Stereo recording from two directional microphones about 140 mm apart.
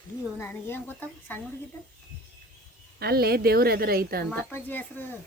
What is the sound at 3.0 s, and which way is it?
A woman's voice, 90° right.